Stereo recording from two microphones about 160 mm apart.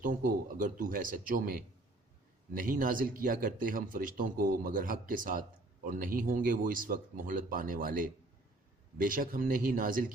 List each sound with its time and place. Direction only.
0.0 s speech: 60° right (ahead or behind)